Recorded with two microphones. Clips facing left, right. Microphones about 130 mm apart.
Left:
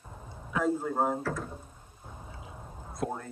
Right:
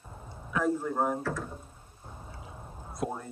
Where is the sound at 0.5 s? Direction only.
20° left (ahead or behind).